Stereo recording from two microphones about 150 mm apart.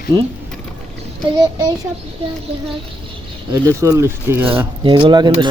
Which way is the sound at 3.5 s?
20° right (ahead or behind).